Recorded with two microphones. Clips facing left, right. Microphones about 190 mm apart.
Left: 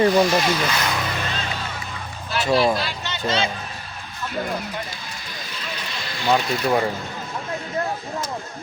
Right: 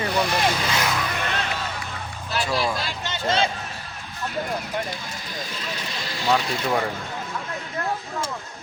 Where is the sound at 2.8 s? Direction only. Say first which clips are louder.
Even; 50° right (ahead or behind).